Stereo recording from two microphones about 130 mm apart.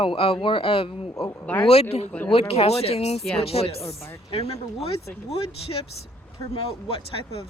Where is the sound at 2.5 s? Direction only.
50° left (ahead or behind).